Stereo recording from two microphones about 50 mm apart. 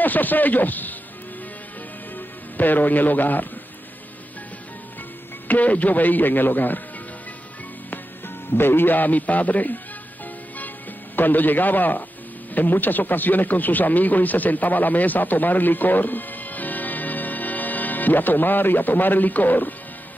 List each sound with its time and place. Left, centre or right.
0.0 s a man's voice: left
2.1 s a man's voice: left
5.5 s a man's voice: left
8.5 s a man's voice: left
11.1 s a man's voice: left